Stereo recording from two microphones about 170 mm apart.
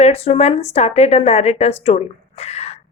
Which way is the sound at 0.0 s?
35° left (ahead or behind).